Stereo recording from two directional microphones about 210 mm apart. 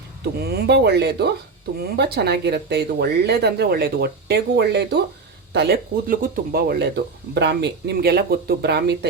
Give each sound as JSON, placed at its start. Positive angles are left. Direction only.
{"t": 0.4, "sound": "speech", "side_deg": -50}